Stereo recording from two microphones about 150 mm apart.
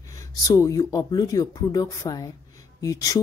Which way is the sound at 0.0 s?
20° left (ahead or behind).